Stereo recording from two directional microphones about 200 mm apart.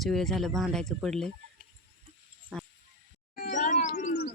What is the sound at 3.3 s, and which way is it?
Bird, 45° left (ahead or behind).